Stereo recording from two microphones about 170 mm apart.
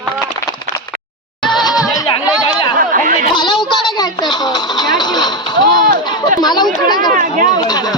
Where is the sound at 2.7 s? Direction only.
55° right (ahead or behind).